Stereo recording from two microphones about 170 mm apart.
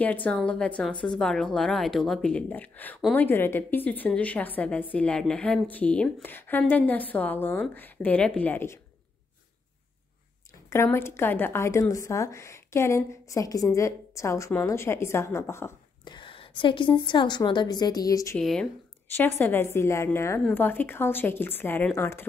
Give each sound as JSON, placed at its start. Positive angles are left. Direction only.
{"t": 0.0, "sound": "speech", "side_deg": 10}
{"t": 10.7, "sound": "speech", "side_deg": 15}
{"t": 16.0, "sound": "a woman's voice", "side_deg": 25}
{"t": 18.4, "sound": "speech", "side_deg": 0}
{"t": 19.1, "sound": "speech", "side_deg": 15}